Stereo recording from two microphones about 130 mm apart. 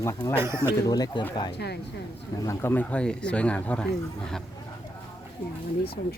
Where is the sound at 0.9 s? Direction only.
30° left (ahead or behind).